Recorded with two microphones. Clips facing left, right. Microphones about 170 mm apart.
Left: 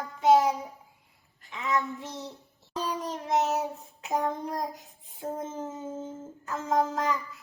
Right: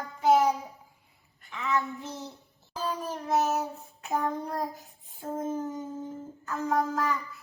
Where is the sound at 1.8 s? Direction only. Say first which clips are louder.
Even; 35° right (ahead or behind).